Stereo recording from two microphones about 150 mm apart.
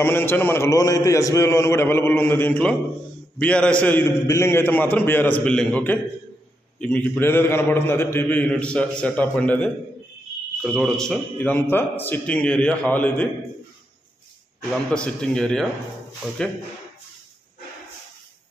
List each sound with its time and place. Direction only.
0.0 s a man's voice: 15° left (ahead or behind)
10.6 s a man's voice: centre (ahead or behind)
14.9 s a man's voice: 5° left (ahead or behind)